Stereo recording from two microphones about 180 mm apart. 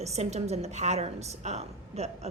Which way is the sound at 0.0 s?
35° right (ahead or behind).